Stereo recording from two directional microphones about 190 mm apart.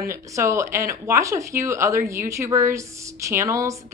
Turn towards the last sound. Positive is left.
turn(degrees=-15)  # may be behind; listen again after turning